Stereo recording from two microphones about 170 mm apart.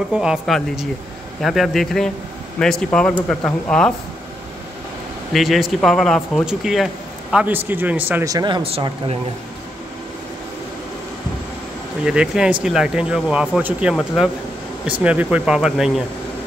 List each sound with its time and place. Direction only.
0.1 s speech: 5° right (ahead or behind)
5.3 s speech: centre (ahead or behind); by 8.6 s 20° right (ahead or behind)
8.6 s speech: 35° right (ahead or behind)
12.0 s speech: 5° right (ahead or behind)